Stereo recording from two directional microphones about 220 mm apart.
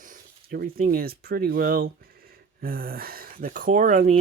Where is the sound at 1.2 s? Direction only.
45° right (ahead or behind).